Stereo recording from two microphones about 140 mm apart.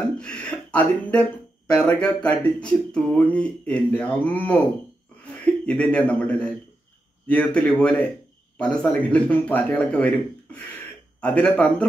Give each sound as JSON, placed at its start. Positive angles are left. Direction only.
{"t": 0.2, "sound": "a man's voice", "side_deg": 5}